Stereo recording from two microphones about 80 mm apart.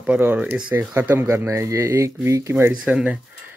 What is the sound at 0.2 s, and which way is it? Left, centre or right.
Speech, right.